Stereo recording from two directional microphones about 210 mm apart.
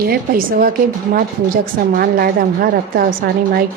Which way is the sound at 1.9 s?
45° right (ahead or behind).